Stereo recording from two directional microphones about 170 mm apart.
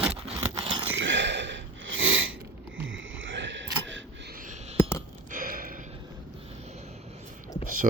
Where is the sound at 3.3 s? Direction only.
90° right.